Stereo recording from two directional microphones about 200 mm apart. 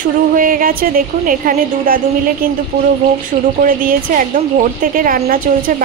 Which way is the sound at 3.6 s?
45° right (ahead or behind).